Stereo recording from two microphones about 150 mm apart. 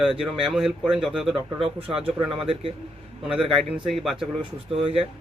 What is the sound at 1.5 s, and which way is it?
Speech, 40° right (ahead or behind).